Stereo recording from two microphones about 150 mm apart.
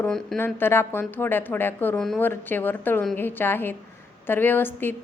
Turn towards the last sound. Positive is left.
turn(degrees=15)  # may be behind; listen again after turning